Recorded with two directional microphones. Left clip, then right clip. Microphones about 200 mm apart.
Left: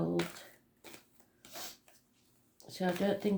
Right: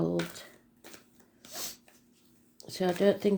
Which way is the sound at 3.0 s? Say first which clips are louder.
Right 9 dB; 40° right (ahead or behind).